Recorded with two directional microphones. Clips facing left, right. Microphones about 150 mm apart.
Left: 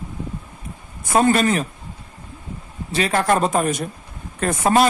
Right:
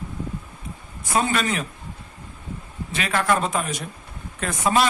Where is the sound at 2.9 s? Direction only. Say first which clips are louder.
Left 4 dB; 35° left (ahead or behind).